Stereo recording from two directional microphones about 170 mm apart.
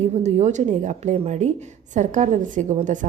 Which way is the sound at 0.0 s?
40° right (ahead or behind).